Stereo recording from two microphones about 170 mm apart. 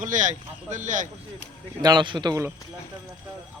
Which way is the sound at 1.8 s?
25° right (ahead or behind).